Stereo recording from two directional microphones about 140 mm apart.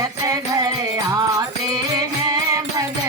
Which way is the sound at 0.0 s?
25° right (ahead or behind).